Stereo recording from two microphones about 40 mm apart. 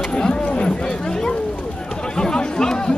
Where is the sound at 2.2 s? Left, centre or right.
Centre.